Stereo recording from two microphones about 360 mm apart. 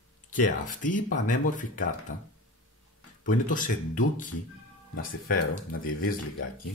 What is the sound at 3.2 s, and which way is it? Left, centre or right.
Speech, left.